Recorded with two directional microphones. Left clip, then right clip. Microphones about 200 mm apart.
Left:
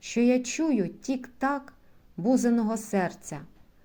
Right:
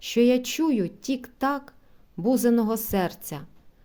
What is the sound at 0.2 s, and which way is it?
A woman's voice, 40° right (ahead or behind).